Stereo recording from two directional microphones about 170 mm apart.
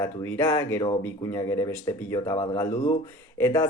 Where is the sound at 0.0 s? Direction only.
15° left (ahead or behind).